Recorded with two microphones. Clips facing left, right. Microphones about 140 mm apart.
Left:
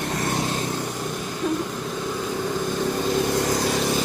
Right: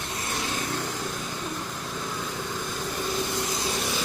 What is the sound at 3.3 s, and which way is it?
Vehicle, 85° left.